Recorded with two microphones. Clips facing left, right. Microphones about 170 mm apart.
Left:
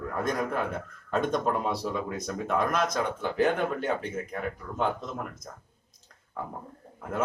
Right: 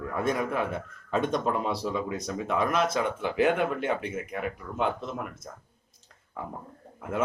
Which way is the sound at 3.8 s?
35° left (ahead or behind).